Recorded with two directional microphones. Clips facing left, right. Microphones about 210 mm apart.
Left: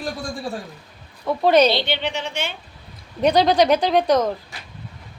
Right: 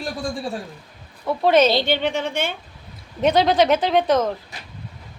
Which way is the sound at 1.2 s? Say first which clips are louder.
Left 1 dB; centre (ahead or behind).